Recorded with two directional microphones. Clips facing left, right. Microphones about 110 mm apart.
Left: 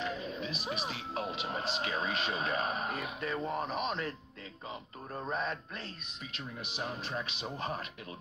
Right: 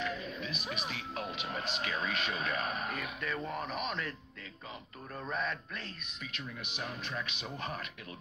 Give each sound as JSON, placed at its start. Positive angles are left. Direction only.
{"t": 0.0, "sound": "speech", "side_deg": 30}
{"t": 5.1, "sound": "speech", "side_deg": 30}